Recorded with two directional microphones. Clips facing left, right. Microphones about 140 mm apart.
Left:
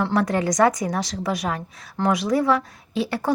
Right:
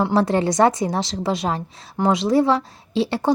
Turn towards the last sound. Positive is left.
turn(degrees=-25)  # may be behind; listen again after turning